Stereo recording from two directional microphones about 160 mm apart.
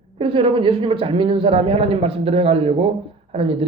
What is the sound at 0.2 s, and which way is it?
Speech, 35° right (ahead or behind).